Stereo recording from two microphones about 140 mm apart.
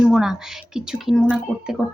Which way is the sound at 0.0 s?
5° right (ahead or behind).